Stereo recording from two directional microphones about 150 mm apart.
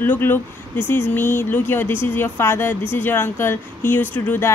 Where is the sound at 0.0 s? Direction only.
15° left (ahead or behind).